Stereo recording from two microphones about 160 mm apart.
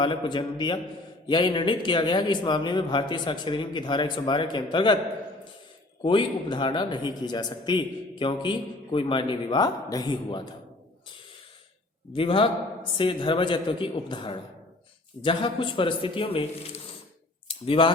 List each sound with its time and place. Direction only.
0.0 s a man's voice: 30° left (ahead or behind)
6.0 s a man's voice: 30° left (ahead or behind)
12.1 s speech: 35° left (ahead or behind)